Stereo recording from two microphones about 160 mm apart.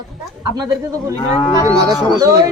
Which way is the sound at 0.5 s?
20° right (ahead or behind).